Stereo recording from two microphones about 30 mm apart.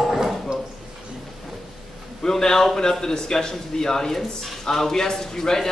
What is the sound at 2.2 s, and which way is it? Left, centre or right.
A man's voice, centre.